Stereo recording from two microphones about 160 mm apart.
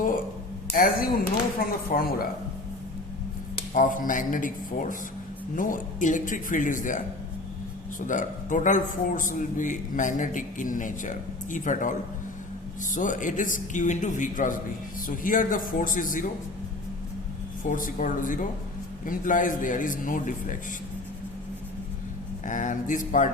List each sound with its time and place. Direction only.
0.7 s speech: 65° left (ahead or behind)
3.8 s a man's voice: 55° left (ahead or behind)
17.6 s a man's voice: 55° left (ahead or behind)
22.4 s a man's voice: 50° left (ahead or behind)